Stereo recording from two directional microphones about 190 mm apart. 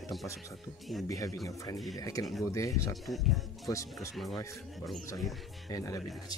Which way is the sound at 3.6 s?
15° left (ahead or behind).